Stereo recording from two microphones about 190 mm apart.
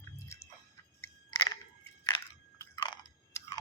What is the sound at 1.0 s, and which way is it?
Crunch, 15° left (ahead or behind).